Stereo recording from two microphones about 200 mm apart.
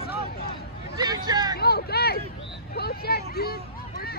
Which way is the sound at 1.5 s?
50° left (ahead or behind).